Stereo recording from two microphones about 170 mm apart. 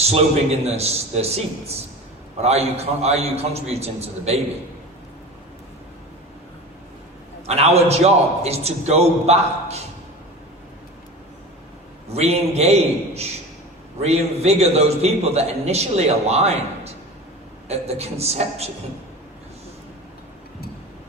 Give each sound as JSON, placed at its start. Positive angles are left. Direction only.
{"t": 0.6, "sound": "a man's voice", "side_deg": -40}
{"t": 7.4, "sound": "a man's voice", "side_deg": -40}
{"t": 12.0, "sound": "a man's voice", "side_deg": -40}